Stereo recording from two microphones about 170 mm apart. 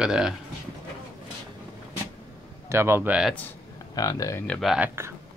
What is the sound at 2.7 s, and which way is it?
Speech, 15° right (ahead or behind).